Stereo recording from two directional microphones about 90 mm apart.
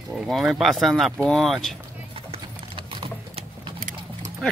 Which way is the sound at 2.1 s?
85° right.